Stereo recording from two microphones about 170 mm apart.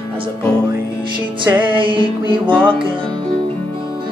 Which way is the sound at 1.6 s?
30° right (ahead or behind).